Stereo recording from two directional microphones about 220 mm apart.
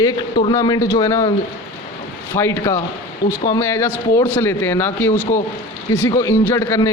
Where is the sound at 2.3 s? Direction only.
15° left (ahead or behind).